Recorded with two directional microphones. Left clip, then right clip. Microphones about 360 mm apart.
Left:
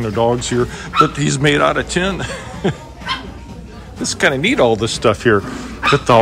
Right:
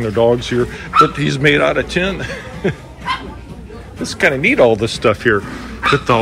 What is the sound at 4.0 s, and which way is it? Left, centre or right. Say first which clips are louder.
A man's voice: right 1 dB; centre.